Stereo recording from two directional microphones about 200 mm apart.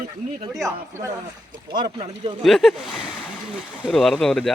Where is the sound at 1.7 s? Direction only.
20° right (ahead or behind).